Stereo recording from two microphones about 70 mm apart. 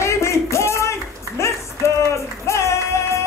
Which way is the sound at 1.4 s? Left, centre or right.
Left.